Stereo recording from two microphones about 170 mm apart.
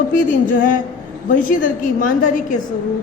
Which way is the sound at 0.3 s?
55° left (ahead or behind).